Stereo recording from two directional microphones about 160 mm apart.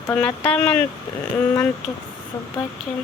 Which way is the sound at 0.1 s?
15° left (ahead or behind).